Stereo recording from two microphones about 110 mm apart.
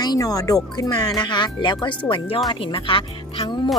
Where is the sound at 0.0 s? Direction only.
35° left (ahead or behind); by 3.4 s 55° left (ahead or behind).